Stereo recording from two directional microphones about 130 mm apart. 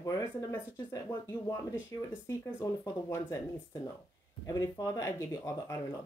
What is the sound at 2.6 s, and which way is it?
Speech, 20° left (ahead or behind).